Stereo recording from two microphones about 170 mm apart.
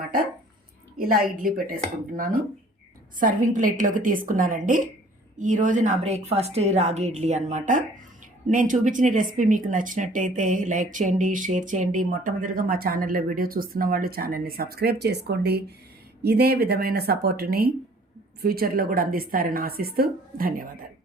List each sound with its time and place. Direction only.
0.9 s a woman's voice: 55° right (ahead or behind)